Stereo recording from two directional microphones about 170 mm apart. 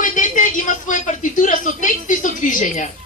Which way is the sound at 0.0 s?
50° left (ahead or behind).